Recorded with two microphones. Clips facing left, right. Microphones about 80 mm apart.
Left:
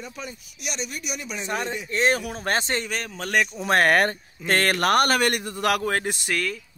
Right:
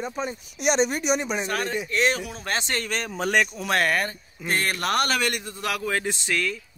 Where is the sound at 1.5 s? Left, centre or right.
Left.